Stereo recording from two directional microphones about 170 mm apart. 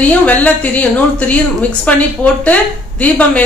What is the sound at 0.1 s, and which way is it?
Speech, 10° left (ahead or behind).